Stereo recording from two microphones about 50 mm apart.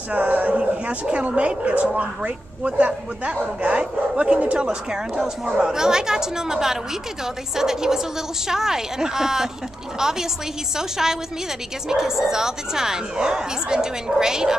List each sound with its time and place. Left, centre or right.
0.1 s speech: right; by 14.6 s centre